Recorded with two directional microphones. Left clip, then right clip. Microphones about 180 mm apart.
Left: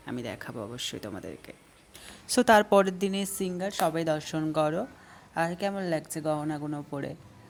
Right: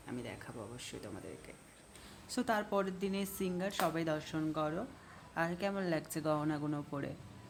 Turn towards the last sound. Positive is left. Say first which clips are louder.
# left 5 dB
turn(degrees=20)  # may be behind; listen again after turning